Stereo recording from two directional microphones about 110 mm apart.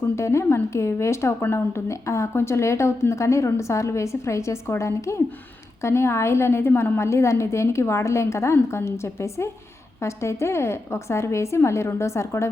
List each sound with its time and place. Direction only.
0.2 s a woman's voice: 25° left (ahead or behind)